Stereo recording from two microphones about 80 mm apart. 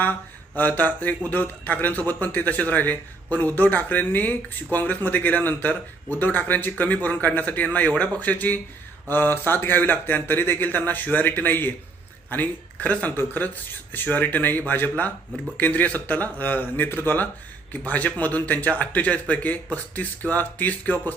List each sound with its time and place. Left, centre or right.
0.0 s a man's voice: left